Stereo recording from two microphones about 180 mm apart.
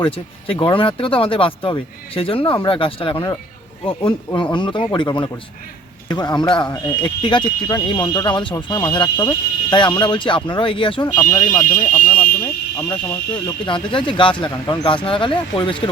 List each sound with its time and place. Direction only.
0.0 s speech: 30° left (ahead or behind)
4.5 s speech: 25° left (ahead or behind)
11.9 s fire alarm: 50° left (ahead or behind)
12.9 s speech: 25° left (ahead or behind)